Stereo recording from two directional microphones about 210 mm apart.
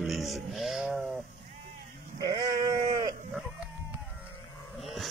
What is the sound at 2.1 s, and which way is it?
Sheep, 20° right (ahead or behind).